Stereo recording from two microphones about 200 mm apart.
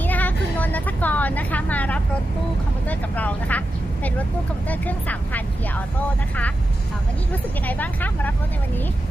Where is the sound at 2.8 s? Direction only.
5° left (ahead or behind).